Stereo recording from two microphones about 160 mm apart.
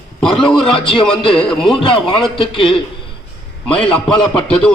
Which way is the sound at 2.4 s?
30° left (ahead or behind).